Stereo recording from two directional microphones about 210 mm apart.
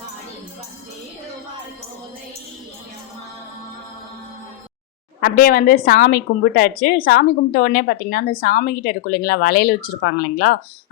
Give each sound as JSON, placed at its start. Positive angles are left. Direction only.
{"t": 5.2, "sound": "a woman's voice", "side_deg": 45}